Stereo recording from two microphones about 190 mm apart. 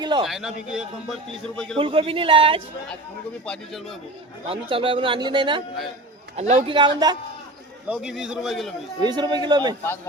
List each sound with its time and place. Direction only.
0.0 s speech: 20° right (ahead or behind)
0.3 s a man's voice: centre (ahead or behind)
1.8 s speech: 30° right (ahead or behind)
3.4 s a man's voice: 5° left (ahead or behind)
4.4 s speech: 30° right (ahead or behind)
6.3 s a man's voice: 35° right (ahead or behind)
6.7 s speech: 25° right (ahead or behind)
7.9 s a man's voice: 5° right (ahead or behind)
9.0 s speech: 20° right (ahead or behind)